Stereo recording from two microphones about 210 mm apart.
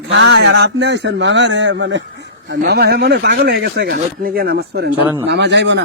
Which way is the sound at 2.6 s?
50° right (ahead or behind).